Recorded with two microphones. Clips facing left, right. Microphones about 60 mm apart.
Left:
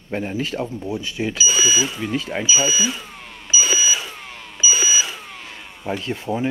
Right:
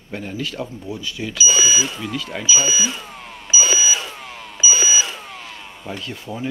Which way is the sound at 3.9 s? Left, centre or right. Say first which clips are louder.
Right 1 dB; centre.